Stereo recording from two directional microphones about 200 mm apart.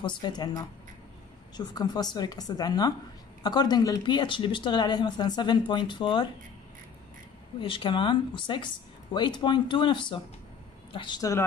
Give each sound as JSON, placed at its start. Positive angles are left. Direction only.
{"t": 0.0, "sound": "speech", "side_deg": 20}
{"t": 7.6, "sound": "speech", "side_deg": 25}